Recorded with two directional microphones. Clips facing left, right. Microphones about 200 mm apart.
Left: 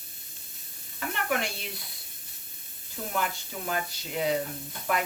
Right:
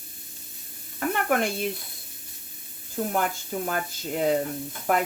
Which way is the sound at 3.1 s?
45° right (ahead or behind).